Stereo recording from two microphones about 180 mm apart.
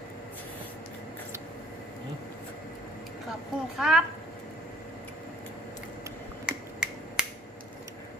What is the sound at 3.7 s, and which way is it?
Speech, centre (ahead or behind).